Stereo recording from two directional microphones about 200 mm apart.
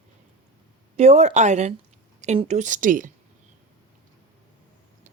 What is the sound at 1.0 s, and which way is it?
Speech, 35° right (ahead or behind).